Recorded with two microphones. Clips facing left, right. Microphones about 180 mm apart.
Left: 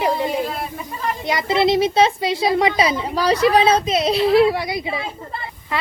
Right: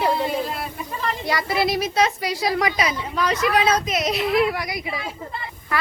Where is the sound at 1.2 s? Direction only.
20° left (ahead or behind).